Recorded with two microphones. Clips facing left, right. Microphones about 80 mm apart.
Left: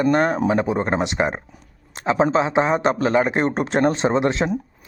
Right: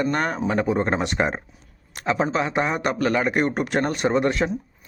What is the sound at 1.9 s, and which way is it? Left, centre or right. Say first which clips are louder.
A man's voice: left 4 dB; left.